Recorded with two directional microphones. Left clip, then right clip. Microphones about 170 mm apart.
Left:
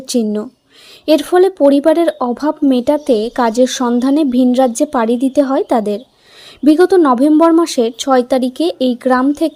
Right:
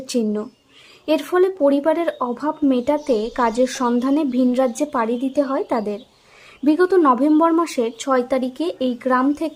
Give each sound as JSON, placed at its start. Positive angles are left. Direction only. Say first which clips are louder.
{"t": 0.1, "sound": "speech", "louder": "left 6 dB", "side_deg": 30}